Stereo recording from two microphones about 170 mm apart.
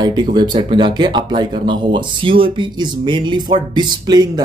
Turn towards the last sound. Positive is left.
turn(degrees=-25)  # may be behind; listen again after turning